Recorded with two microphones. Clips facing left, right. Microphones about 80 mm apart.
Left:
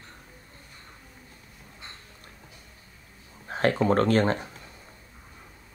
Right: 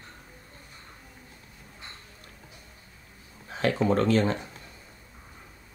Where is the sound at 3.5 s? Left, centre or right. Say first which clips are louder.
Left 3 dB; left.